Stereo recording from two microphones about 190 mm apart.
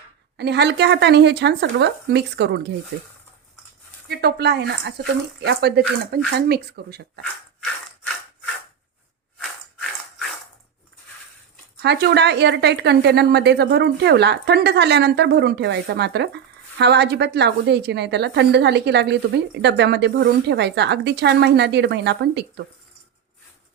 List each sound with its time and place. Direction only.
0.3 s speech: 60° right (ahead or behind)
4.1 s speech: 60° right (ahead or behind)
11.8 s speech: 60° right (ahead or behind)